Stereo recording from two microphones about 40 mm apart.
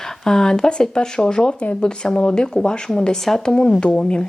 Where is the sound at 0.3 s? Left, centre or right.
Centre.